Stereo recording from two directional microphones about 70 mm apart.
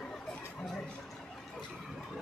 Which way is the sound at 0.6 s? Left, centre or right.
Centre.